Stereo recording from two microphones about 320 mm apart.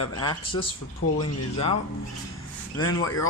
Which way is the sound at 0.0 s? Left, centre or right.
Centre.